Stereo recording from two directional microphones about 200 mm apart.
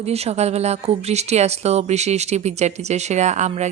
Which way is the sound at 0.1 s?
30° right (ahead or behind).